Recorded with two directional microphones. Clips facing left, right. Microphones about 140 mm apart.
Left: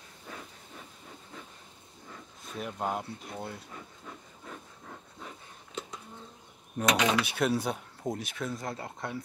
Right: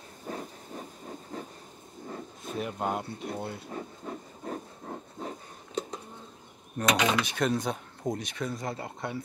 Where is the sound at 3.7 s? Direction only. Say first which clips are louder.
Right 8 dB; 40° right (ahead or behind).